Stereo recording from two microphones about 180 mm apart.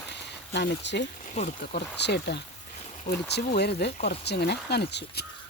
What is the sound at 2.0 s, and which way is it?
Speech, 70° left (ahead or behind).